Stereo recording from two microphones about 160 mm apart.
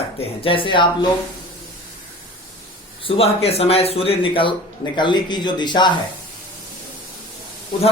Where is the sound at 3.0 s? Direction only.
40° left (ahead or behind).